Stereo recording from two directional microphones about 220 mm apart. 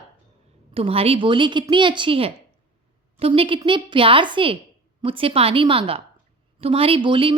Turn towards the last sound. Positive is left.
turn(degrees=-25)  # may be behind; listen again after turning